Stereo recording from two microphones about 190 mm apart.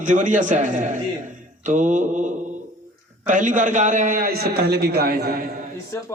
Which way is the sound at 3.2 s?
40° right (ahead or behind).